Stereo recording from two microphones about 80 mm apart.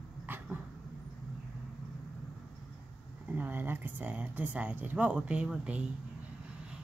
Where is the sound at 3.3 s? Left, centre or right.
Right.